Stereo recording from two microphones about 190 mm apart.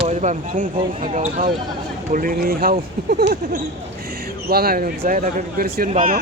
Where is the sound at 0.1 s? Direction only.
40° right (ahead or behind).